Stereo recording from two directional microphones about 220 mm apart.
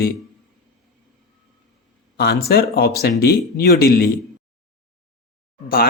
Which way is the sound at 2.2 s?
45° left (ahead or behind).